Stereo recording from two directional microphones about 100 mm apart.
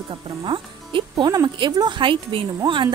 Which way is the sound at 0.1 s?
55° right (ahead or behind).